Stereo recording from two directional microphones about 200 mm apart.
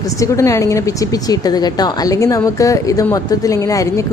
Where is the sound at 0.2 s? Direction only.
15° left (ahead or behind).